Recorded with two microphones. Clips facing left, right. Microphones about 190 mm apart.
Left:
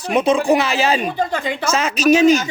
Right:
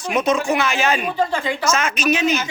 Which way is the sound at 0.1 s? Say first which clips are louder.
Left 4 dB; 30° left (ahead or behind).